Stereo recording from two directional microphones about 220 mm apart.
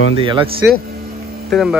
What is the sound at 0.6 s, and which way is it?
Speech, 10° right (ahead or behind).